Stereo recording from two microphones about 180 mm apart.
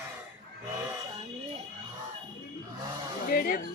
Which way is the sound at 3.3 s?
55° left (ahead or behind).